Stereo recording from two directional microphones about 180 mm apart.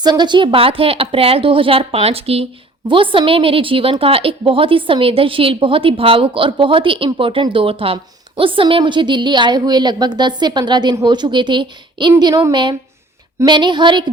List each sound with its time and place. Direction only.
0.0 s a woman's voice: 25° right (ahead or behind)